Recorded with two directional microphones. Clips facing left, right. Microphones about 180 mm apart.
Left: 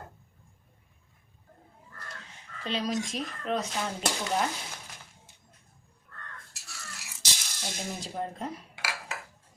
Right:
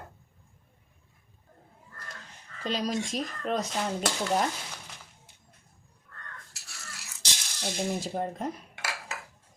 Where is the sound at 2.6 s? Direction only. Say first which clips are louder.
Right 1 dB; 40° right (ahead or behind).